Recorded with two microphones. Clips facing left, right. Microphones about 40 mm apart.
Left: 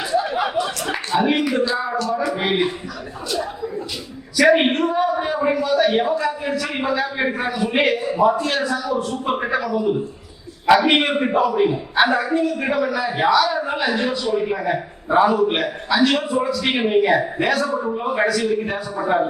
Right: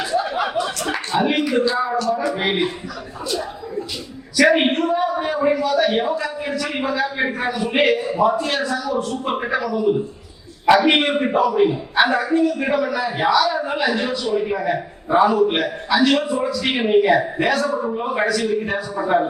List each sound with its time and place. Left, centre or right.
0.0 s a sound: centre
0.6 s a man's voice: centre
4.4 s a man's voice: centre
10.9 s a man's voice: centre